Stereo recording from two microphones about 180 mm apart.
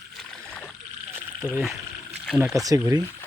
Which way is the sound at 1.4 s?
Centre (ahead or behind).